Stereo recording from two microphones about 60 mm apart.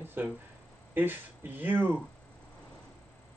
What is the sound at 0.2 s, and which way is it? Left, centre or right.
A man's voice, right.